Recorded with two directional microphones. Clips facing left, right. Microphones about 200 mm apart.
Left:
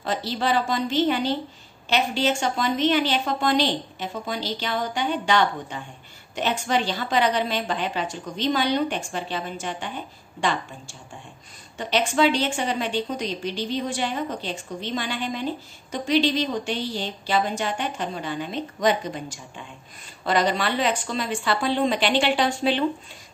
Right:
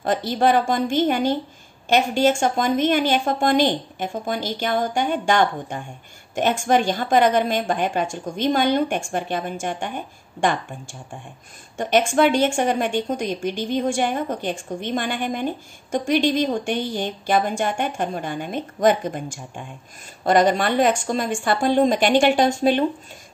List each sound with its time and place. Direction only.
0.0 s a woman's voice: 50° right (ahead or behind)